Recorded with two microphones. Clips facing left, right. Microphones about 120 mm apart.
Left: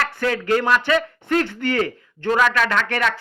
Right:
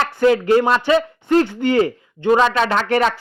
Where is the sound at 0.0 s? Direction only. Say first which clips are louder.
Right 7 dB; 25° right (ahead or behind).